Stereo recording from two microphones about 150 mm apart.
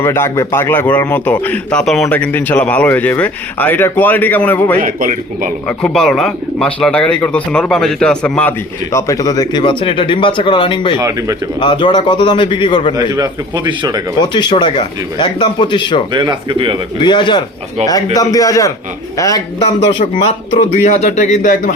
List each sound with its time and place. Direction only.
0.0 s a man's voice: 15° left (ahead or behind)
4.8 s speech: 65° right (ahead or behind)
5.6 s a man's voice: 5° left (ahead or behind)
8.9 s speech: 20° left (ahead or behind)
10.9 s a man's voice: 20° right (ahead or behind)
11.6 s speech: 35° left (ahead or behind)
13.0 s a man's voice: 25° right (ahead or behind)
14.2 s speech: 30° left (ahead or behind)
16.1 s speech: 30° right (ahead or behind)
17.0 s a man's voice: 30° left (ahead or behind)
19.8 s a man's voice: 35° left (ahead or behind); by 21.7 s 55° left (ahead or behind)